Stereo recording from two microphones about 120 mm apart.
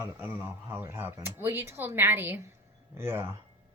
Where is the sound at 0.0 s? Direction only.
15° right (ahead or behind).